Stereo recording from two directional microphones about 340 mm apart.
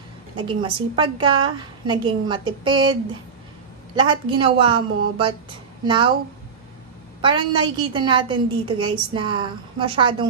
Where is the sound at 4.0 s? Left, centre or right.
Centre.